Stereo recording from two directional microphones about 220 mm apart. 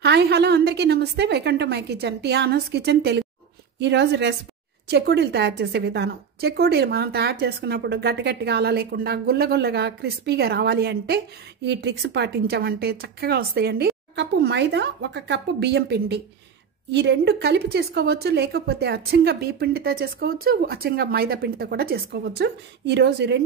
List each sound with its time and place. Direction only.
0.0 s a woman's voice: 50° right (ahead or behind)